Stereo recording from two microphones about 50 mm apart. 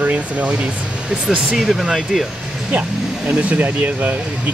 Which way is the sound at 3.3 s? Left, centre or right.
Right.